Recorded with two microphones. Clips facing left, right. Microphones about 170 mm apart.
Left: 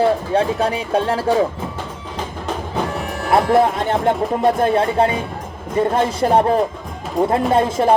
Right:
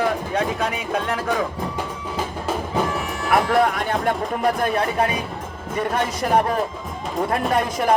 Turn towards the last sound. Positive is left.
turn(degrees=25)  # may be behind; listen again after turning